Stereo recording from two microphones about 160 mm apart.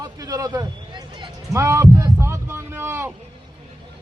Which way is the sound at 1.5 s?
20° right (ahead or behind).